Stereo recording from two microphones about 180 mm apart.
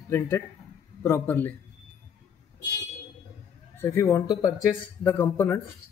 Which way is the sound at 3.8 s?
15° left (ahead or behind).